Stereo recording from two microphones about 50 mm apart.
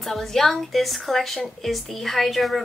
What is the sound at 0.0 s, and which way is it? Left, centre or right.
A woman's voice, centre.